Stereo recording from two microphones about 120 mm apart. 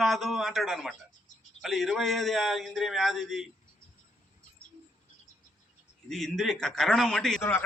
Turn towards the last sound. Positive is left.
turn(degrees=20)  # may be behind; listen again after turning